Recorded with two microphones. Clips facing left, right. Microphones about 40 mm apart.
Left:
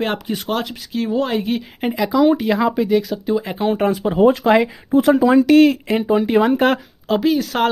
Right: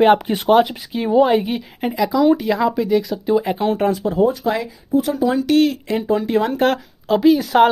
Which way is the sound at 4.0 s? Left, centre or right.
Left.